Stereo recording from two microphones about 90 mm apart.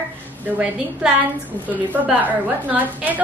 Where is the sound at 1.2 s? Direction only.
20° right (ahead or behind).